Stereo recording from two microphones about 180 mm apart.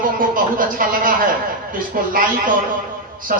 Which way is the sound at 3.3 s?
55° right (ahead or behind).